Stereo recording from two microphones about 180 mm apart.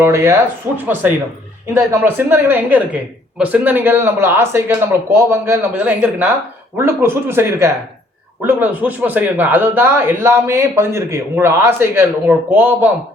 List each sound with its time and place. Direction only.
0.0 s speech: 15° right (ahead or behind)
1.7 s speech: 15° right (ahead or behind)